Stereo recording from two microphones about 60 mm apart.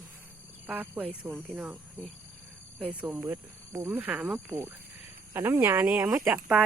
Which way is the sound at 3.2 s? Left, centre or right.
Right.